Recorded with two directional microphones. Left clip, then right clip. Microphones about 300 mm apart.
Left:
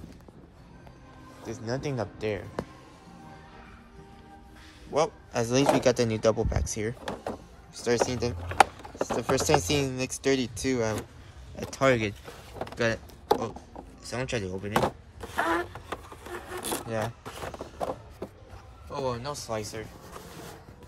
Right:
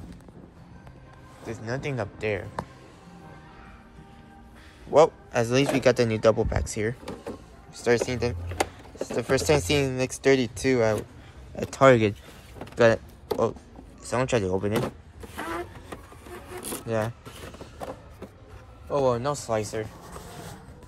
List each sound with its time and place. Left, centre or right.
1.4 s speech: centre
4.9 s a man's voice: centre
14.0 s power windows: centre
17.4 s a sound: left
18.9 s speech: centre